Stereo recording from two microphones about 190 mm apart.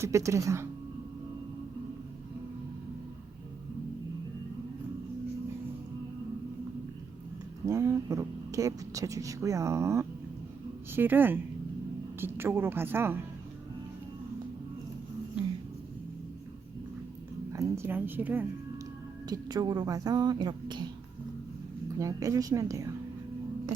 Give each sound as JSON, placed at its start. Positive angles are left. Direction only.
{"t": 0.0, "sound": "speech", "side_deg": -15}
{"t": 7.6, "sound": "speech", "side_deg": -15}
{"t": 17.5, "sound": "a woman's voice", "side_deg": -15}
{"t": 19.3, "sound": "speech", "side_deg": -20}
{"t": 21.9, "sound": "speech", "side_deg": -15}